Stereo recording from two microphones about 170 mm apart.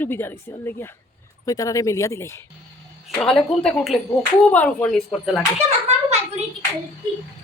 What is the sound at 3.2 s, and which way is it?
Speech, 5° left (ahead or behind).